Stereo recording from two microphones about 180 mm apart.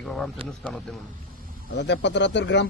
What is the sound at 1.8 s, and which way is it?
Speech, 75° left (ahead or behind).